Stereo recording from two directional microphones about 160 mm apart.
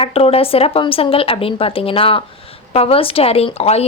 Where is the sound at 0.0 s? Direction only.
35° left (ahead or behind).